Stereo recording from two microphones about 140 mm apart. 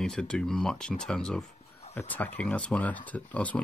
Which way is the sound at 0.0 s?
5° left (ahead or behind).